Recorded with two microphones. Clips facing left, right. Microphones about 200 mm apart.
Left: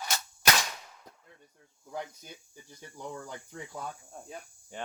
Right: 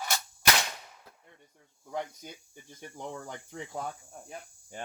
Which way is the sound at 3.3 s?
60° right (ahead or behind).